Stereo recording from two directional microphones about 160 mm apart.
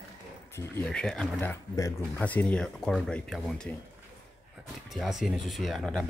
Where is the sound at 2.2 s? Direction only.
10° left (ahead or behind).